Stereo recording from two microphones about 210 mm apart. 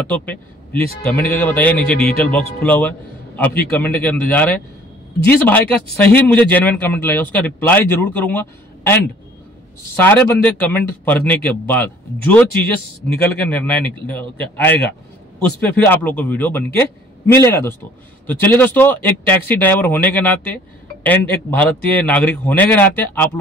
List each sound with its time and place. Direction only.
0.1 s a man's voice: 5° left (ahead or behind)